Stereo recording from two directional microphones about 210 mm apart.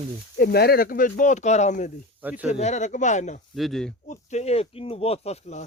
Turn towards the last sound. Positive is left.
turn(degrees=30)  # may be behind; listen again after turning